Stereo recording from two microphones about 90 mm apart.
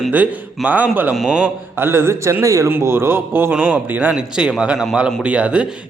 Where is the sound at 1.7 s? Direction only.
25° right (ahead or behind); by 5.2 s centre (ahead or behind).